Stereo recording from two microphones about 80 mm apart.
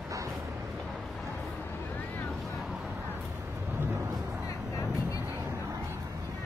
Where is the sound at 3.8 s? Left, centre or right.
Right.